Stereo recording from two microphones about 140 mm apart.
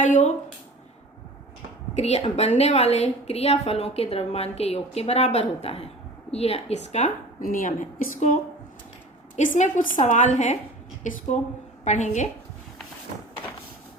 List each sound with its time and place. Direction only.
0.0 s a woman's voice: 60° left (ahead or behind)
2.0 s a woman's voice: 50° left (ahead or behind)
7.4 s a woman's voice: 75° left (ahead or behind); by 10.6 s 55° left (ahead or behind)
11.0 s a woman's voice: 65° left (ahead or behind)